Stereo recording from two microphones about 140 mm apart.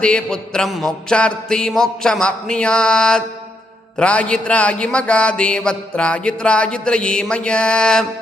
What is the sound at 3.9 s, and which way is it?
Music, 10° left (ahead or behind).